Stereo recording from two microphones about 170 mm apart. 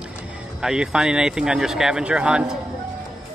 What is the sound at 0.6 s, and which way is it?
Speech, 5° right (ahead or behind).